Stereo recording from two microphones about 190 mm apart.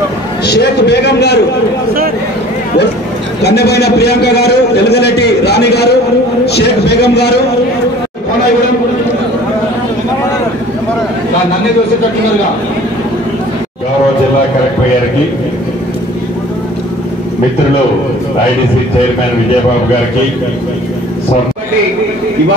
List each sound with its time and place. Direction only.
0.5 s a man's voice: 60° left (ahead or behind)
3.4 s a man's voice: 60° left (ahead or behind)